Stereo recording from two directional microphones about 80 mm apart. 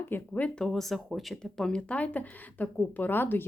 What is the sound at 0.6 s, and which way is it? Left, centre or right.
Speech, centre.